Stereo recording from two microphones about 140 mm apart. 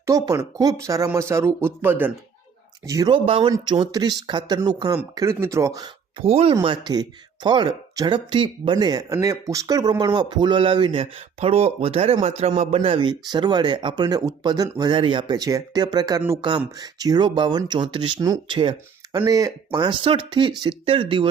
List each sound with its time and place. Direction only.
0.0 s speech: 25° right (ahead or behind)
3.1 s speech: 40° right (ahead or behind)
6.1 s a man's voice: 45° right (ahead or behind)
19.2 s speech: 25° right (ahead or behind)